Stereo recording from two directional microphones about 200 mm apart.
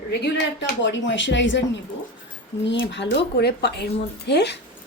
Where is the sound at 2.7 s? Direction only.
60° left (ahead or behind).